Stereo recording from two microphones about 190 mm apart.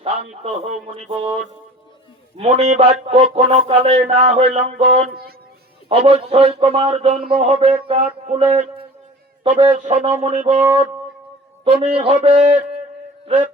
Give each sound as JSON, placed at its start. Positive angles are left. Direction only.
{"t": 0.0, "sound": "a man's voice", "side_deg": -35}
{"t": 11.6, "sound": "a man's voice", "side_deg": -30}